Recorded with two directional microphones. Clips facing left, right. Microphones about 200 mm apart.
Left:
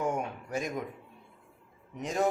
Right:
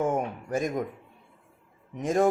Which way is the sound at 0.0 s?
50° right (ahead or behind).